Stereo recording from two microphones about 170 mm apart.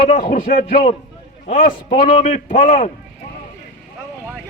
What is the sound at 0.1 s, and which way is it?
A man's voice, 50° left (ahead or behind).